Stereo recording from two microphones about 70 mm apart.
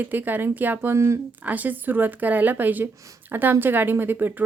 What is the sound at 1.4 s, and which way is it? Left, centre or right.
Speech, right.